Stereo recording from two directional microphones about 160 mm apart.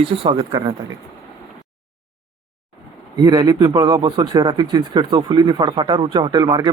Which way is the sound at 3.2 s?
25° right (ahead or behind).